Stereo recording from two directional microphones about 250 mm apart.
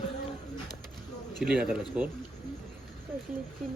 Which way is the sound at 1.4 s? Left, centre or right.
Centre.